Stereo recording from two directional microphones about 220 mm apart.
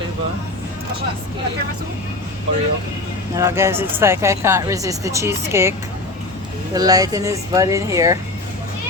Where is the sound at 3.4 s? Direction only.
15° right (ahead or behind).